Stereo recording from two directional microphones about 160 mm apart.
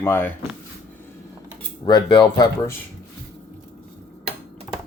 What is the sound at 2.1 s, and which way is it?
Speech, 25° left (ahead or behind).